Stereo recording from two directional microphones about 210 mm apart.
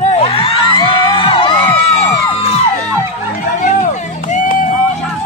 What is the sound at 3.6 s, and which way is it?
Music, 35° left (ahead or behind).